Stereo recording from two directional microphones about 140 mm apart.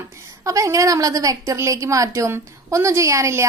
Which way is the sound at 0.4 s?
20° right (ahead or behind).